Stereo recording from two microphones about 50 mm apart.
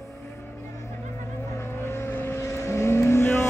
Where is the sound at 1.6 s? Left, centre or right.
Left.